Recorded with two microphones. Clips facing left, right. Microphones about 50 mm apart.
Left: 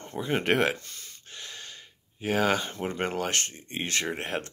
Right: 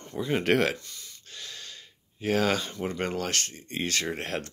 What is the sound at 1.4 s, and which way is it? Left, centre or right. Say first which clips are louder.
Gasp: even; left.